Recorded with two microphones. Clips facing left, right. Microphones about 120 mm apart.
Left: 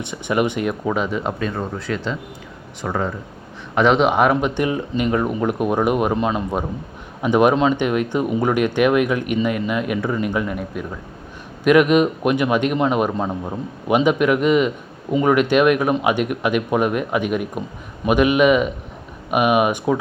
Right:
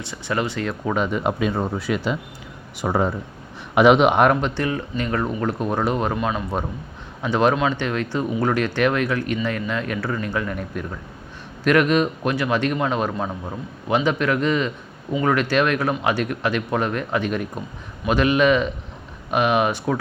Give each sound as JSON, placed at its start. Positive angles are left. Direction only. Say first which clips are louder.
{"t": 0.0, "sound": "speech", "louder": "left 5 dB", "side_deg": 20}
{"t": 0.9, "sound": "speech", "louder": "even", "side_deg": 0}
{"t": 3.8, "sound": "speech", "louder": "right 1 dB", "side_deg": -5}
{"t": 6.1, "sound": "a man's voice", "louder": "left 3 dB", "side_deg": 25}
{"t": 7.2, "sound": "speech", "louder": "left 4 dB", "side_deg": 15}